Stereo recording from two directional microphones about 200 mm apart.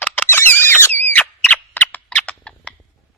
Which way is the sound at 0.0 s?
10° left (ahead or behind).